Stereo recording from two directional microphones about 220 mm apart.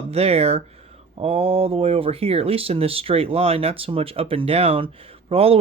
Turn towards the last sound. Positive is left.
turn(degrees=-25)  # may be behind; listen again after turning